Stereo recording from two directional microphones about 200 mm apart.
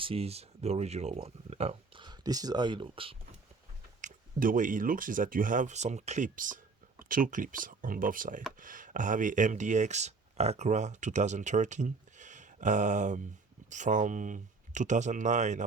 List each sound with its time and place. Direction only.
0.0 s speech: 30° right (ahead or behind)
4.0 s speech: 40° right (ahead or behind)